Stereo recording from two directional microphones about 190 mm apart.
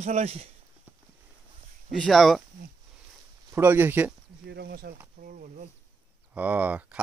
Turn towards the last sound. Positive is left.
turn(degrees=-5)  # may be behind; listen again after turning